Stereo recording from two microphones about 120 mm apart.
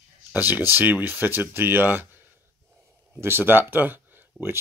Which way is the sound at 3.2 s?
20° right (ahead or behind).